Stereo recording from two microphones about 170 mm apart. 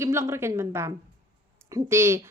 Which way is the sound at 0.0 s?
15° right (ahead or behind).